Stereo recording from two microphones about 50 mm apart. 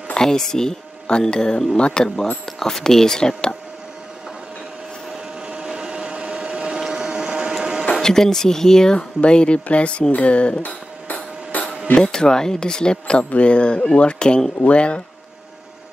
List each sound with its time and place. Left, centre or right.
0.1 s speech: centre
5.5 s vehicle: centre
6.8 s printer: centre
8.0 s speech: centre
11.5 s a sound: left
12.0 s speech: centre